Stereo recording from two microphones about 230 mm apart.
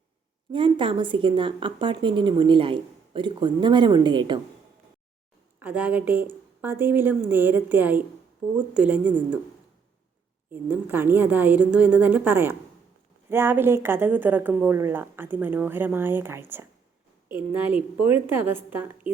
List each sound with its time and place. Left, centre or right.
0.5 s speech: right
5.5 s a woman's voice: centre
10.5 s a woman's voice: centre